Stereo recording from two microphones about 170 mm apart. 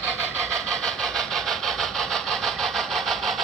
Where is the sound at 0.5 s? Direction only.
5° left (ahead or behind).